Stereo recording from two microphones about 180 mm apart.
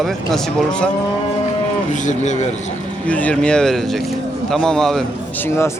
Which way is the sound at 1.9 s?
40° left (ahead or behind).